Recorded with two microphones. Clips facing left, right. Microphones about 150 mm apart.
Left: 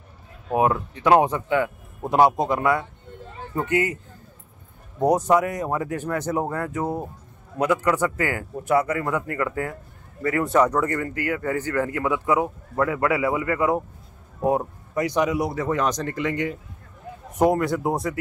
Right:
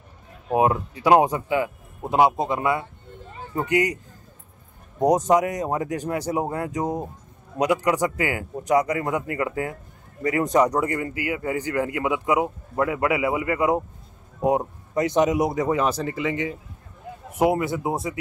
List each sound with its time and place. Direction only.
0.5 s a man's voice: 20° right (ahead or behind)
2.3 s speech: centre (ahead or behind)
3.5 s a man's voice: 15° right (ahead or behind)
5.0 s a man's voice: 20° right (ahead or behind); by 18.1 s centre (ahead or behind)